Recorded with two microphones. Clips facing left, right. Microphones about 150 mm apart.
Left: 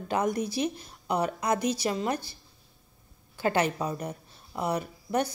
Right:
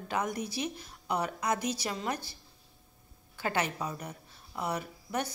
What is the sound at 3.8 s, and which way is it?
Speech, 30° left (ahead or behind).